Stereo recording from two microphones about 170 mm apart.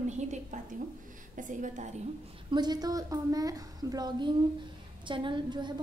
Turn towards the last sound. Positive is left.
turn(degrees=-25)  # may be behind; listen again after turning